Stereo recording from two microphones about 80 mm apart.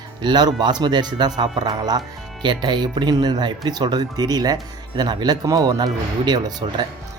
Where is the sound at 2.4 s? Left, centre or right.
Right.